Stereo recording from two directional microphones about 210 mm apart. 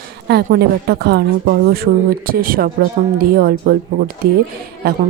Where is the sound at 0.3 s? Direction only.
50° right (ahead or behind).